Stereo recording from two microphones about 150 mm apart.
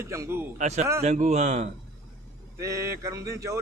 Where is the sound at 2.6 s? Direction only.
20° right (ahead or behind).